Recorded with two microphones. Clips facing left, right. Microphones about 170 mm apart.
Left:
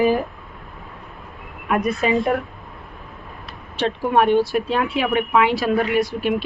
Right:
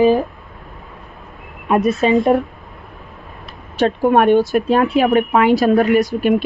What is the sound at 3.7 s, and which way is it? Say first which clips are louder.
Speech: right 5 dB; 50° right (ahead or behind).